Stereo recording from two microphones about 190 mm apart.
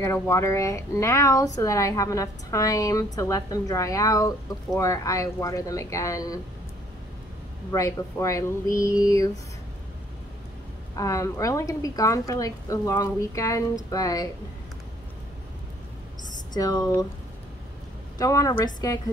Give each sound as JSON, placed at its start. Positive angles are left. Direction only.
{"t": 0.0, "sound": "speech", "side_deg": 15}
{"t": 7.7, "sound": "speech", "side_deg": 15}
{"t": 11.0, "sound": "speech", "side_deg": 15}
{"t": 16.5, "sound": "speech", "side_deg": 20}
{"t": 18.1, "sound": "speech", "side_deg": 15}